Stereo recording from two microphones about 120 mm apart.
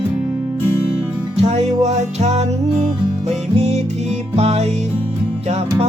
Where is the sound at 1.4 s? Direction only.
65° right (ahead or behind).